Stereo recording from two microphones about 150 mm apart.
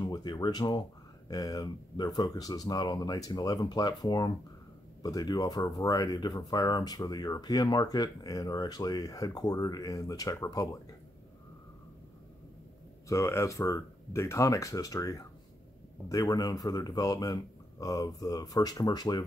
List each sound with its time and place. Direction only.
0.0 s speech: 25° left (ahead or behind)
13.1 s speech: 20° left (ahead or behind)